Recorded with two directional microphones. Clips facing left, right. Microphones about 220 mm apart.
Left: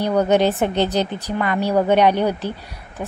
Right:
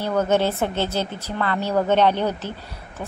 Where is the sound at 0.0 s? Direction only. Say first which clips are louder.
Left 4 dB; 15° left (ahead or behind).